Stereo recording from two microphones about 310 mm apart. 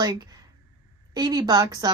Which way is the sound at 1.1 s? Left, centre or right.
Centre.